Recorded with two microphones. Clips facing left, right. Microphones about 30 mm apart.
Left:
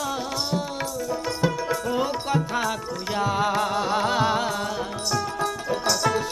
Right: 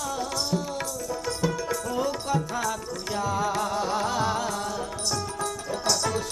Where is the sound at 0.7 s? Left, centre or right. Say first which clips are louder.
Left 3 dB; centre.